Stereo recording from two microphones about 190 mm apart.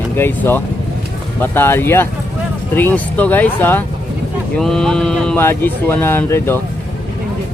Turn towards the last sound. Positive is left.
turn(degrees=10)  # may be behind; listen again after turning